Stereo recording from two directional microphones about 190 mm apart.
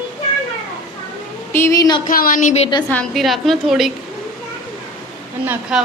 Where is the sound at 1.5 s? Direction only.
15° left (ahead or behind).